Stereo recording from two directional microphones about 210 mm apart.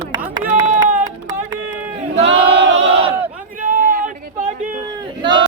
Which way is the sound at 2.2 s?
55° right (ahead or behind).